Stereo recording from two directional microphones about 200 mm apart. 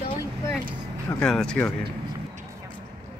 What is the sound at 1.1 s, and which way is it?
Speech, 5° left (ahead or behind).